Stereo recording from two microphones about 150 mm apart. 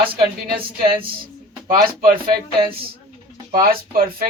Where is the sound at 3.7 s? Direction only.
75° right (ahead or behind).